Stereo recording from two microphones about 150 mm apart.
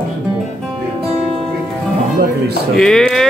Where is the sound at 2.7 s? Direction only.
5° left (ahead or behind).